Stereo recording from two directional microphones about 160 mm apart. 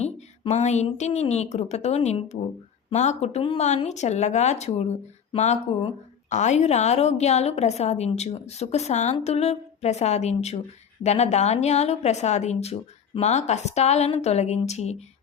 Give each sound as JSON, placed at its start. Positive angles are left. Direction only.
{"t": 0.0, "sound": "a woman's voice", "side_deg": 45}